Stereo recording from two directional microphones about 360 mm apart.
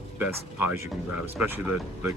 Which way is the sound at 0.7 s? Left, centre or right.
Centre.